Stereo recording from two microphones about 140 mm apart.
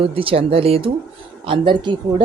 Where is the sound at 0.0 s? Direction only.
40° right (ahead or behind).